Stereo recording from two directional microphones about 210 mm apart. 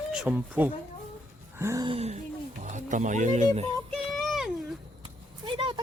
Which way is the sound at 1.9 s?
30° right (ahead or behind).